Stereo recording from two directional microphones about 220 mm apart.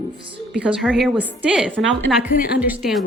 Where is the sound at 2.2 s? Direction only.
40° left (ahead or behind).